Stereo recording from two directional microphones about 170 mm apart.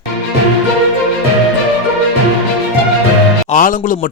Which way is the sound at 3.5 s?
50° left (ahead or behind).